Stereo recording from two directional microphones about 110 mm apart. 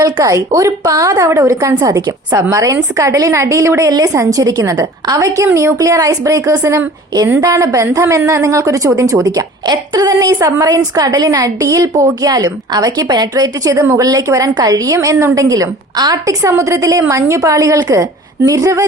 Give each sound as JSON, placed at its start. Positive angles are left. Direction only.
{"t": 0.0, "sound": "a woman's voice", "side_deg": -30}